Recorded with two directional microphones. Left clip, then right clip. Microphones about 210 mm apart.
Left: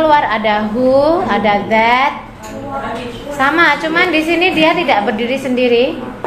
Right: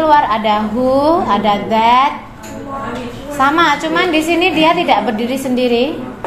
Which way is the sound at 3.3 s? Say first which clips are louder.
Even; 30° right (ahead or behind).